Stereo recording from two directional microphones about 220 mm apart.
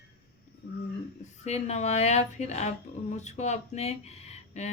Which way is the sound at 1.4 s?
30° left (ahead or behind).